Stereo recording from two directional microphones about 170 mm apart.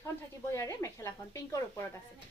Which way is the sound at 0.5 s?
15° left (ahead or behind).